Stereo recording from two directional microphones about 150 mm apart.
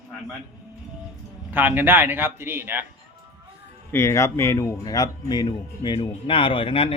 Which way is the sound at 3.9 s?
20° left (ahead or behind).